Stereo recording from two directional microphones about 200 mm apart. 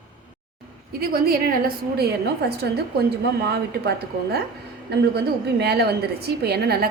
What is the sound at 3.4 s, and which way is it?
A woman's voice, 55° right (ahead or behind).